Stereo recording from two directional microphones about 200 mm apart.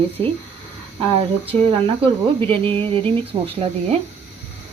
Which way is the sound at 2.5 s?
25° right (ahead or behind).